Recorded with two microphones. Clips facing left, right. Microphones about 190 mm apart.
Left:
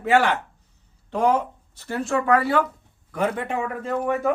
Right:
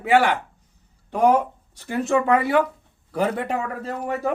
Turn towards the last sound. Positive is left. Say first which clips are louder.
# left 3 dB
turn(degrees=-35)  # may be behind; listen again after turning